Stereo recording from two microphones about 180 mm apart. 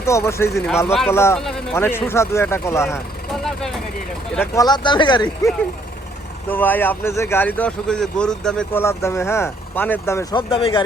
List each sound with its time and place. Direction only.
0.0 s a man's voice: 15° left (ahead or behind)
0.9 s speech: 5° right (ahead or behind)
1.1 s a man's voice: 15° left (ahead or behind)
3.3 s speech: centre (ahead or behind)
4.4 s speech: 20° left (ahead or behind)
6.5 s a man's voice: 10° left (ahead or behind)
10.5 s speech: 30° left (ahead or behind)